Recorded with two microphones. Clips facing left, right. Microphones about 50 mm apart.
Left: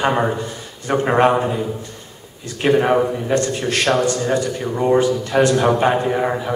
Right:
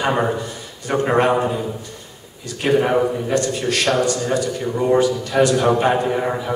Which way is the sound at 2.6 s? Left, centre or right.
Centre.